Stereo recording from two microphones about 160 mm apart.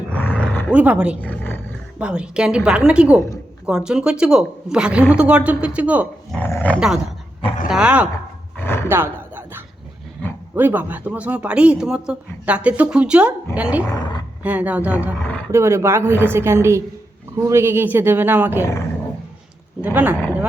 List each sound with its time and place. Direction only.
0.2 s roar: 10° left (ahead or behind)
0.7 s speech: 10° right (ahead or behind)
1.2 s speech: 10° left (ahead or behind)
2.0 s a woman's voice: 5° right (ahead or behind)
6.3 s dog: 10° left (ahead or behind)
6.7 s a woman's voice: 5° right (ahead or behind)
8.5 s roar: 15° left (ahead or behind)
8.9 s a sound: 15° right (ahead or behind)
10.5 s speech: 10° right (ahead or behind)
13.8 s speech: 25° left (ahead or behind)
14.4 s speech: 10° right (ahead or behind)
19.8 s speech: 10° right (ahead or behind)